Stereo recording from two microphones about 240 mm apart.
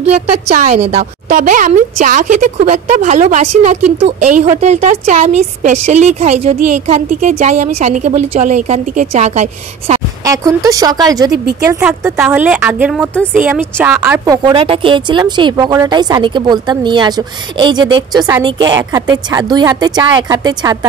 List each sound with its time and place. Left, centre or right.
0.1 s a woman's voice: right
10.2 s a woman's voice: centre